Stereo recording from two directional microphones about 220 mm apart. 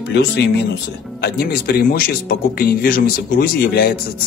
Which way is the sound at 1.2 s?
45° left (ahead or behind).